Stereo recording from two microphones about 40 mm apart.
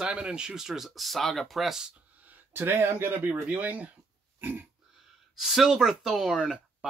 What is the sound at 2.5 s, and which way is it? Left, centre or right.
Speech, right.